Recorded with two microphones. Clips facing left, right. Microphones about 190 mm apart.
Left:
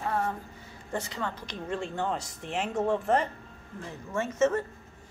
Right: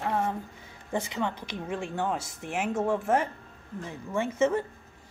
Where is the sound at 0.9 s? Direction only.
15° right (ahead or behind).